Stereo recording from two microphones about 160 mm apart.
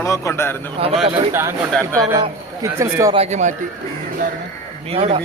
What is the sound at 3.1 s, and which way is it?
Speech, 45° right (ahead or behind).